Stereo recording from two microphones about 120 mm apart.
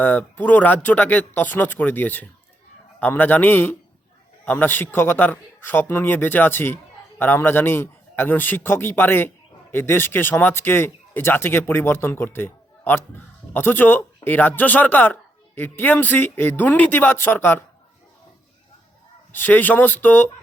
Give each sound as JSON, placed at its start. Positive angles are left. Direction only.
{"t": 0.0, "sound": "speech", "side_deg": 15}
{"t": 19.3, "sound": "speech", "side_deg": 15}